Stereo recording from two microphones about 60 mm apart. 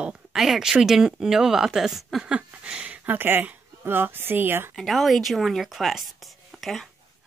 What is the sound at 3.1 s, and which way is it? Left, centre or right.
Speech, right.